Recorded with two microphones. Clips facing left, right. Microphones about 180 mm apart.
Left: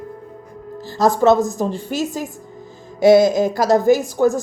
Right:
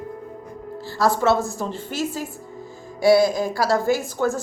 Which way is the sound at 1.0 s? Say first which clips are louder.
Left 5 dB; 15° left (ahead or behind).